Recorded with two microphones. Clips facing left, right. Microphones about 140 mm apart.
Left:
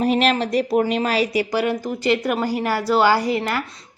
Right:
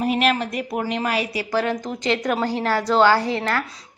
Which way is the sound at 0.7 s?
25° left (ahead or behind).